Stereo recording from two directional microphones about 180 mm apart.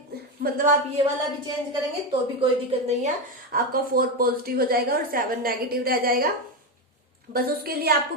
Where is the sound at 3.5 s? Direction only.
55° right (ahead or behind).